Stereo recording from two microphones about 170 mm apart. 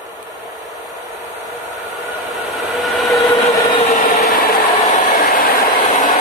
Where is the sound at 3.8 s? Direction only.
45° left (ahead or behind).